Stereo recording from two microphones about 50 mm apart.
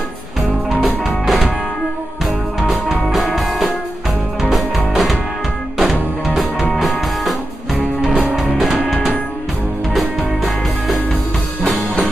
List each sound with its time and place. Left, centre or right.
0.7 s music: right
1.0 s music: centre
2.7 s music: centre
8.0 s music: right
9.9 s music: centre